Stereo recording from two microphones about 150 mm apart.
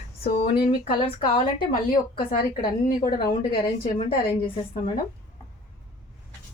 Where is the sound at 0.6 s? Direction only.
35° left (ahead or behind).